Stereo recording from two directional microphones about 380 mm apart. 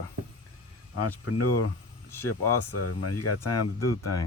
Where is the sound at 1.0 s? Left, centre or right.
Left.